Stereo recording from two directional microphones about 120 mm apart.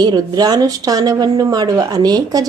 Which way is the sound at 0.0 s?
35° right (ahead or behind).